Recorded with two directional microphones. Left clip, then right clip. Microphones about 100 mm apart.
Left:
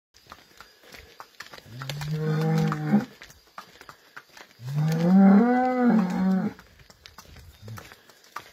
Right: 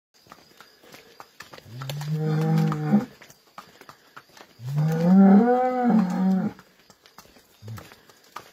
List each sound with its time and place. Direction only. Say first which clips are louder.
0.9 s livestock: left 1 dB; centre (ahead or behind)
4.7 s wild animals: right 2 dB; centre (ahead or behind)
7.7 s horse: even; centre (ahead or behind)